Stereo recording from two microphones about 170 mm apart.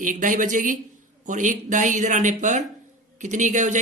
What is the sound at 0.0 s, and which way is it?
Speech, 50° right (ahead or behind).